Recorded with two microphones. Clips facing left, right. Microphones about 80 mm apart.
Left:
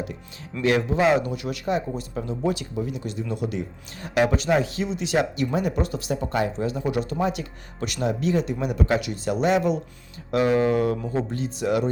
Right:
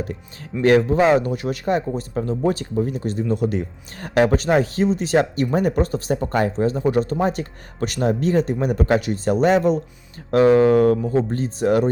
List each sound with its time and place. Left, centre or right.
0.6 s speech: right